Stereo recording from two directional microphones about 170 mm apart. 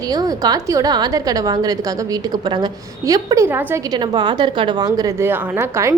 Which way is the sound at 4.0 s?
25° right (ahead or behind).